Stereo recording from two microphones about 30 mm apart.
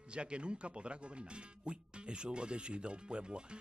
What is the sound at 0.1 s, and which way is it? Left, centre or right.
Speech, right.